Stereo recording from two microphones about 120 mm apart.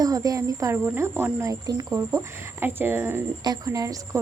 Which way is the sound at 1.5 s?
30° right (ahead or behind).